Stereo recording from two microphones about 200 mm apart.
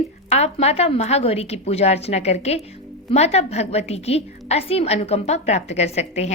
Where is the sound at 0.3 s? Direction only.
30° left (ahead or behind).